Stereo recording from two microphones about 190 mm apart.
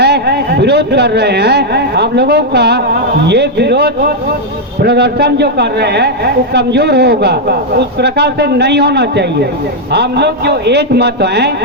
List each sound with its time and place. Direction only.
0.0 s a man's voice: 60° right (ahead or behind)